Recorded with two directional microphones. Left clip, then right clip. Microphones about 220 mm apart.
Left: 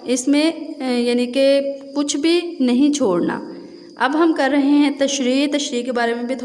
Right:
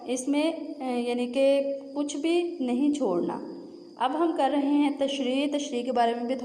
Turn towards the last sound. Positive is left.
turn(degrees=15)  # may be behind; listen again after turning